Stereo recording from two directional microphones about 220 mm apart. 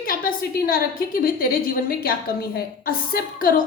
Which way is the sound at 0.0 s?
40° left (ahead or behind).